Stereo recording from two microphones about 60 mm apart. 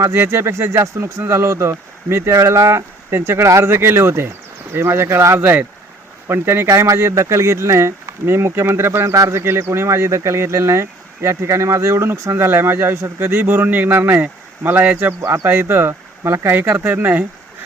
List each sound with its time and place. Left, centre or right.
0.1 s speech: right
2.3 s speech: right
15.2 s speech: right
16.6 s speech: right